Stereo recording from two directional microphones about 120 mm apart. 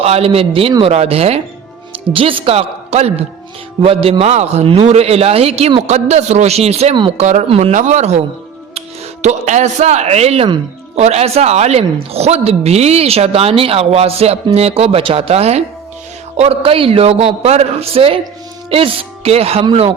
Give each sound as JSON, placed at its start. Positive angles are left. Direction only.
{"t": 0.0, "sound": "a woman's voice", "side_deg": -55}
{"t": 4.2, "sound": "a woman's voice", "side_deg": -65}
{"t": 7.2, "sound": "speech", "side_deg": -75}
{"t": 7.4, "sound": "a woman's voice", "side_deg": -55}
{"t": 7.7, "sound": "speech", "side_deg": -80}
{"t": 9.2, "sound": "a woman's voice", "side_deg": -75}